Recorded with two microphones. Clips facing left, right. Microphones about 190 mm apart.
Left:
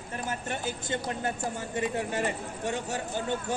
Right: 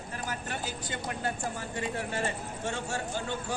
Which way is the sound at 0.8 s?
20° left (ahead or behind).